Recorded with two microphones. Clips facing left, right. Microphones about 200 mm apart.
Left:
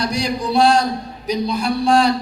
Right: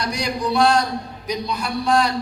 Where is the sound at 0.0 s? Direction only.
30° left (ahead or behind).